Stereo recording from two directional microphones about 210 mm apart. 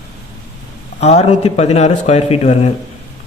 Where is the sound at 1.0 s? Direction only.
30° left (ahead or behind).